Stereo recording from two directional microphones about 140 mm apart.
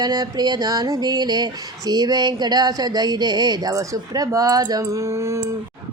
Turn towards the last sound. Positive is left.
turn(degrees=-20)  # may be behind; listen again after turning